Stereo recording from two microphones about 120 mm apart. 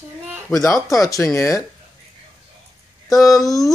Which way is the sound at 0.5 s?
30° left (ahead or behind).